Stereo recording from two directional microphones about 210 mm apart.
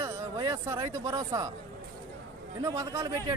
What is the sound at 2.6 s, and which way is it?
Speech, 15° right (ahead or behind).